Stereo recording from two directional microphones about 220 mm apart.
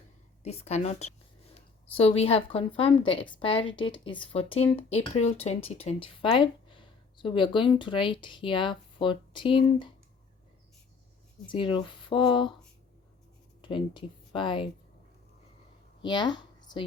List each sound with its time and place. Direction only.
0.4 s speech: 30° left (ahead or behind)
11.4 s speech: 25° left (ahead or behind)
13.6 s speech: 25° left (ahead or behind)
16.0 s a woman's voice: 20° left (ahead or behind)